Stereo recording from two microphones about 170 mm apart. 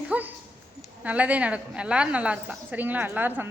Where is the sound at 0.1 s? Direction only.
10° right (ahead or behind).